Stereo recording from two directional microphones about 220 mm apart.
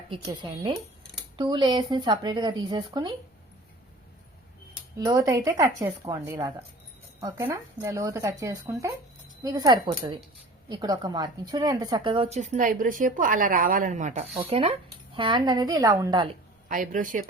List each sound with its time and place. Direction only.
0.1 s speech: 20° right (ahead or behind)
4.9 s speech: 15° right (ahead or behind)
16.6 s speech: 35° right (ahead or behind)